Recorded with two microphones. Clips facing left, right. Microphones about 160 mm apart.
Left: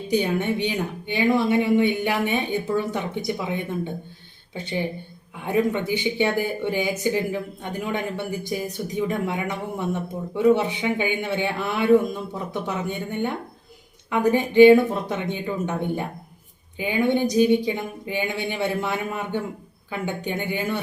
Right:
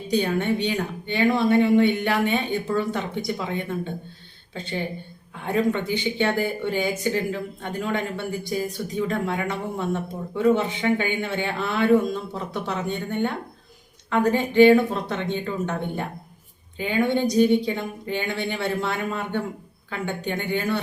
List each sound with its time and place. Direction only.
0.1 s speech: 15° left (ahead or behind)